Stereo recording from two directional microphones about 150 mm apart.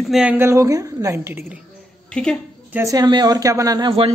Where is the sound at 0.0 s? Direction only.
5° right (ahead or behind).